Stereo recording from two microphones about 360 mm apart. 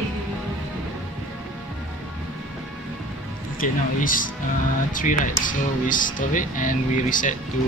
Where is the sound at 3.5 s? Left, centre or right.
Left.